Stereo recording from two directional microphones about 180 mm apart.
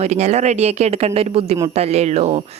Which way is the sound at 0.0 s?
40° right (ahead or behind).